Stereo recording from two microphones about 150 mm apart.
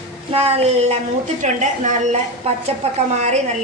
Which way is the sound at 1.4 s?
55° right (ahead or behind).